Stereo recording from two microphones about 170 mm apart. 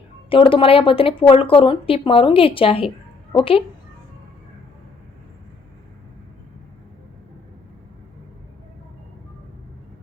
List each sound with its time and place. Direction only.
0.3 s a woman's voice: 30° left (ahead or behind)